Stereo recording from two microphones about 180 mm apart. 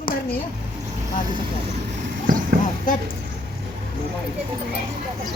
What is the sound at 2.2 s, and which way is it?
Clip-clop, 50° right (ahead or behind).